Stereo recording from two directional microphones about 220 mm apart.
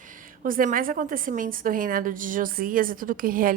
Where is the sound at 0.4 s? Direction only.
40° right (ahead or behind).